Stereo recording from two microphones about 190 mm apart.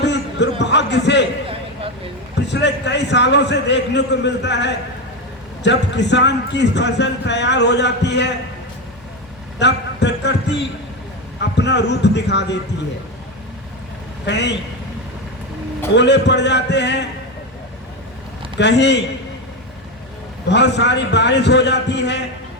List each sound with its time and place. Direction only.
0.0 s a sound: 65° left (ahead or behind)
2.3 s speech: 65° left (ahead or behind)
9.6 s a man's voice: 65° left (ahead or behind)
14.3 s speech: 65° left (ahead or behind)
16.0 s speech: 65° left (ahead or behind)
18.6 s a man's voice: 65° left (ahead or behind)
20.5 s speech: 65° left (ahead or behind)